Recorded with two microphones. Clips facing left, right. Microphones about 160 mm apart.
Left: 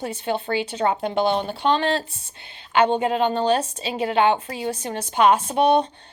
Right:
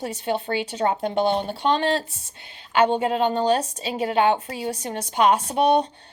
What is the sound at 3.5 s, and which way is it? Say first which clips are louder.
A woman's voice: even; 25° left (ahead or behind).